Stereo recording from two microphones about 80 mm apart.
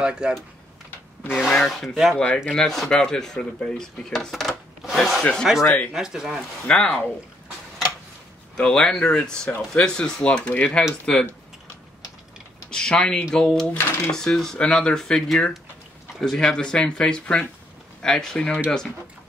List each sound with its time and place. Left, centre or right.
0.0 s speech: centre
0.8 s a sound: left
1.5 s speech: centre
2.1 s speech: centre
5.9 s speech: centre
6.7 s speech: centre
8.5 s speech: centre
12.7 s speech: centre